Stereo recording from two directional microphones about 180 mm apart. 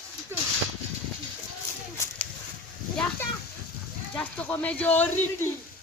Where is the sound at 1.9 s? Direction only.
5° left (ahead or behind).